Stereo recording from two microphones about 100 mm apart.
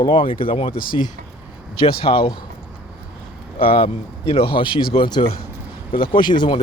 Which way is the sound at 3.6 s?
70° left (ahead or behind).